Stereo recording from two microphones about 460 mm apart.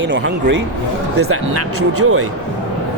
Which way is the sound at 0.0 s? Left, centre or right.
Right.